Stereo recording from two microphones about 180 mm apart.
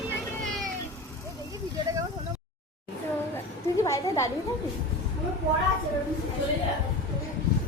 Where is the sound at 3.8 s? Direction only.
15° left (ahead or behind).